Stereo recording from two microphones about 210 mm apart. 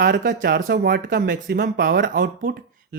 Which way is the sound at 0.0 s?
50° right (ahead or behind).